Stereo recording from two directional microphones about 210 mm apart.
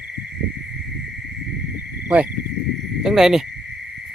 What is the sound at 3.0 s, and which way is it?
Speech, centre (ahead or behind).